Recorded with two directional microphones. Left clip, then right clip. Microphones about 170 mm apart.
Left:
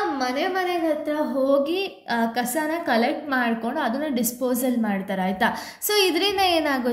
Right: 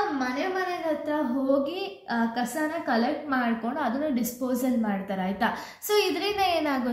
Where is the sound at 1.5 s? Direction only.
45° left (ahead or behind).